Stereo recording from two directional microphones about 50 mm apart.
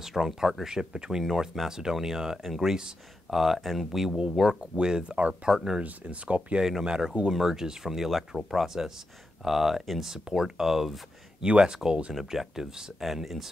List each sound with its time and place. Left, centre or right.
0.0 s speech: centre
2.7 s speech: centre
3.3 s speech: centre
4.2 s speech: centre
5.8 s speech: right
6.8 s speech: centre
11.4 s speech: centre
12.1 s speech: centre